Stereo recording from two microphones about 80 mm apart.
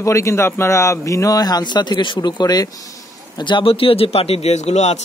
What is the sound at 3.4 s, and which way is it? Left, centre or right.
Speech, left.